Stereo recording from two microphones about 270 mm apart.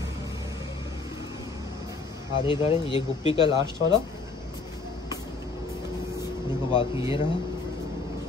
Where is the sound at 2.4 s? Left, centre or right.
Centre.